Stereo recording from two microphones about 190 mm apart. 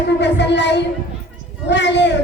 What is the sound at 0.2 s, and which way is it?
Speech, 65° left (ahead or behind).